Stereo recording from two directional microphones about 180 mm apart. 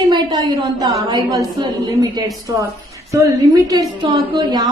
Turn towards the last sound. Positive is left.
turn(degrees=-25)  # may be behind; listen again after turning